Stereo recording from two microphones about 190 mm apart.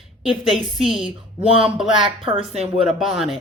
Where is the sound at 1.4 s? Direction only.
30° right (ahead or behind).